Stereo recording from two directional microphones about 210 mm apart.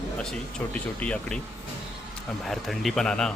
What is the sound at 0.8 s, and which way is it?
Speech, 5° left (ahead or behind).